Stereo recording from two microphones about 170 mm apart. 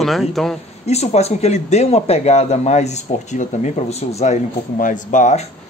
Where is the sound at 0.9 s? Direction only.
40° left (ahead or behind).